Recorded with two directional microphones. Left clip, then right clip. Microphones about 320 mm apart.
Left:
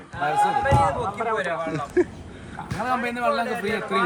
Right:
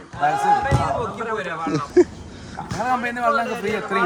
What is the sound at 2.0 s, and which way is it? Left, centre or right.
A man's voice, centre.